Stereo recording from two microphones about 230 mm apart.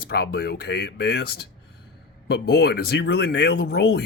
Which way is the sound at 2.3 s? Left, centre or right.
Left.